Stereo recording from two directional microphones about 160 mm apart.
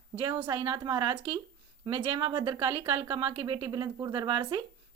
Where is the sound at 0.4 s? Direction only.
30° right (ahead or behind).